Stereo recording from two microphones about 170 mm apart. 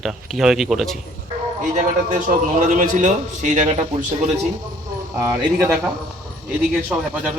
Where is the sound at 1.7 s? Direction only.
50° right (ahead or behind).